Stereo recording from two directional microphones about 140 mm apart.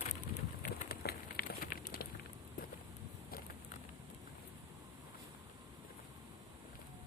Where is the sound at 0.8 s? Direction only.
90° left.